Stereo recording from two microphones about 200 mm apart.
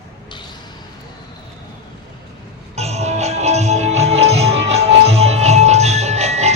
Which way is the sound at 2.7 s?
35° right (ahead or behind).